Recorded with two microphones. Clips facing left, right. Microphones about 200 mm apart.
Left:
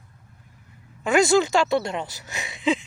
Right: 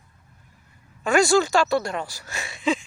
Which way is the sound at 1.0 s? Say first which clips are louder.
Even; 20° left (ahead or behind).